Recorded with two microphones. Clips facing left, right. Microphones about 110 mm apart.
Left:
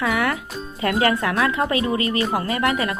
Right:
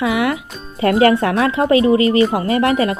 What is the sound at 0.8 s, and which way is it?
Speech, 30° right (ahead or behind).